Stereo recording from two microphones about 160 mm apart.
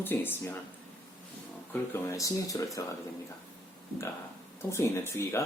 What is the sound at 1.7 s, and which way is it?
Speech, 15° left (ahead or behind).